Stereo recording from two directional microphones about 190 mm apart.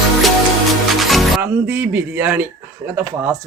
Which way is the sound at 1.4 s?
10° right (ahead or behind).